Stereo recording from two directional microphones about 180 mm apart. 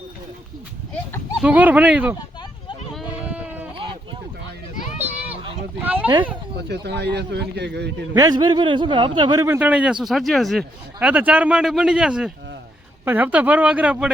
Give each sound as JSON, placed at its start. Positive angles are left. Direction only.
{"t": 1.4, "sound": "speech", "side_deg": -5}
{"t": 2.9, "sound": "sheep", "side_deg": -5}
{"t": 4.9, "sound": "a sound", "side_deg": -10}
{"t": 6.7, "sound": "a man's voice", "side_deg": -70}
{"t": 8.1, "sound": "speech", "side_deg": -20}